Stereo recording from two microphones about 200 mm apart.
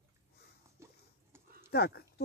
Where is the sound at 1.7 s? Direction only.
55° left (ahead or behind).